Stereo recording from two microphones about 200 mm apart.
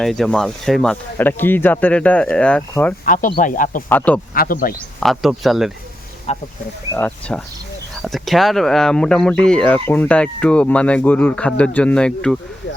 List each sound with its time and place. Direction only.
0.0 s speech: centre (ahead or behind)
3.1 s speech: 40° left (ahead or behind)
3.8 s speech: 10° left (ahead or behind)
4.4 s speech: 45° left (ahead or behind)
4.9 s speech: centre (ahead or behind)
6.3 s speech: 35° left (ahead or behind)
6.9 s speech: 5° left (ahead or behind)